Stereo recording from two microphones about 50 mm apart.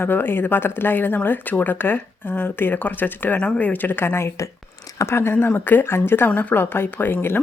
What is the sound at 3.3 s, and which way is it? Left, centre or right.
A woman's voice, left.